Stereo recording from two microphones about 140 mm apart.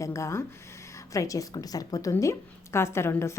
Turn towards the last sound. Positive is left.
turn(degrees=20)  # may be behind; listen again after turning